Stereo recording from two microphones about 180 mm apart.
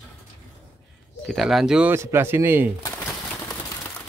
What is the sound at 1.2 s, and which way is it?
Speech, centre (ahead or behind).